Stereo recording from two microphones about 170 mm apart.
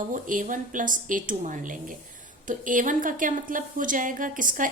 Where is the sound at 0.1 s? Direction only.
50° right (ahead or behind).